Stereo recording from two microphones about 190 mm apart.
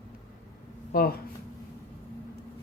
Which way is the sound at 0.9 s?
50° left (ahead or behind).